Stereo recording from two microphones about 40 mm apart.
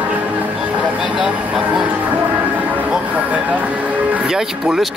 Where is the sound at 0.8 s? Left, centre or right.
Right.